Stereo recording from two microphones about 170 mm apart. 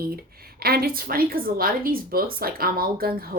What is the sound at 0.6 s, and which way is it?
Speech, 65° right (ahead or behind).